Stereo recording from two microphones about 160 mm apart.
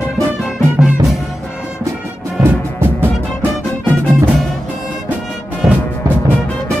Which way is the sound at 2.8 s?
15° right (ahead or behind).